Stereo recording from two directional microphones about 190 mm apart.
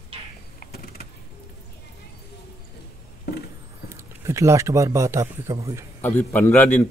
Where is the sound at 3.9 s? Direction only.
15° right (ahead or behind).